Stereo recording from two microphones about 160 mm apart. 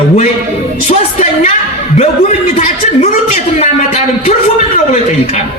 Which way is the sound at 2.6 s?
50° left (ahead or behind).